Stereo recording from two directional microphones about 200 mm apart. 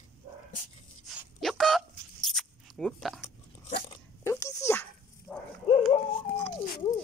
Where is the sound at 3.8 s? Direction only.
15° left (ahead or behind).